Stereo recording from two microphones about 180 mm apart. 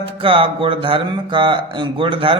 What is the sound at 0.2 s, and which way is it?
Speech, 30° right (ahead or behind).